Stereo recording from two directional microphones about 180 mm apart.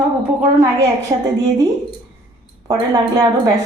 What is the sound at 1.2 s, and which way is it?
Speech, 20° right (ahead or behind).